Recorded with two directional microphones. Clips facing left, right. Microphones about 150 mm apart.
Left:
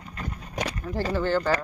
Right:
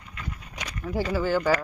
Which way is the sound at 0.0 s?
40° left (ahead or behind).